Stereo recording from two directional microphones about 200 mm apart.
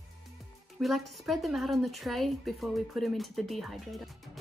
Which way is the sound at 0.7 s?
Centre (ahead or behind).